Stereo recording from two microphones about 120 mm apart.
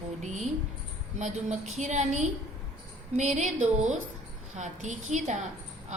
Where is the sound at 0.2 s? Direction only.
80° right.